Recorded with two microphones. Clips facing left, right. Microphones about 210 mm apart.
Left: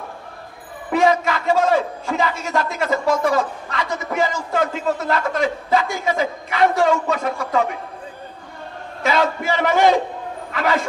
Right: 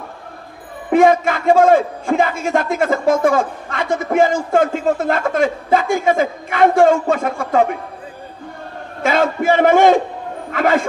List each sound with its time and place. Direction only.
0.9 s a man's voice: 50° right (ahead or behind)
9.0 s a man's voice: 50° right (ahead or behind)